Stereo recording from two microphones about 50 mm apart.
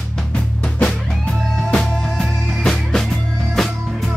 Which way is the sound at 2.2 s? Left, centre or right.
Centre.